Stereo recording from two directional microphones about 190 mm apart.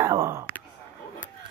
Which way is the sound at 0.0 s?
15° right (ahead or behind).